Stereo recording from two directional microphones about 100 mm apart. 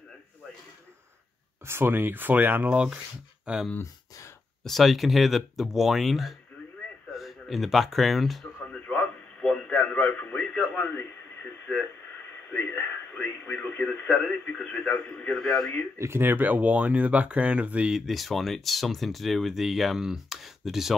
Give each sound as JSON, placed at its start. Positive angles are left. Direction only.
{"t": 1.7, "sound": "speech", "side_deg": -25}
{"t": 4.6, "sound": "speech", "side_deg": 0}
{"t": 8.6, "sound": "radio", "side_deg": 15}
{"t": 12.7, "sound": "speech", "side_deg": 20}
{"t": 16.0, "sound": "speech", "side_deg": -25}